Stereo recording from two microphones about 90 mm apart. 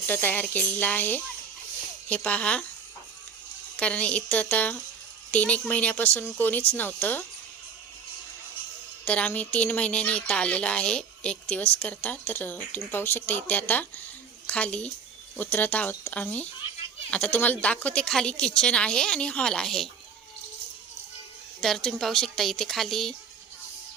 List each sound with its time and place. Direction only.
0.1 s speech: 25° left (ahead or behind)
3.8 s speech: 15° left (ahead or behind)
9.0 s speech: 15° left (ahead or behind)
21.6 s a woman's voice: 5° left (ahead or behind)